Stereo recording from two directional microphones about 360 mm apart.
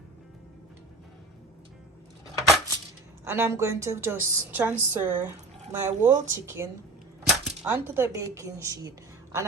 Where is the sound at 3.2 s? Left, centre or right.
Centre.